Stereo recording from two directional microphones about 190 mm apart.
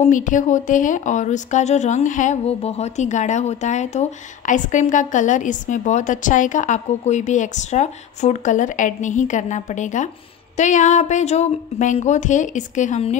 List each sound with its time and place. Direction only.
0.0 s speech: 40° left (ahead or behind)